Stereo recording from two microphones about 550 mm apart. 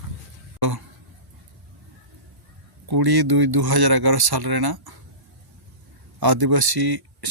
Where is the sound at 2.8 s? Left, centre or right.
Right.